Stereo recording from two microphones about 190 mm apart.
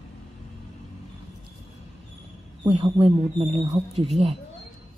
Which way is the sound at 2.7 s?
30° right (ahead or behind).